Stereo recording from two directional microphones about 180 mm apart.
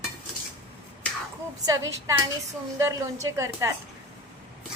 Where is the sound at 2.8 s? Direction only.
15° right (ahead or behind).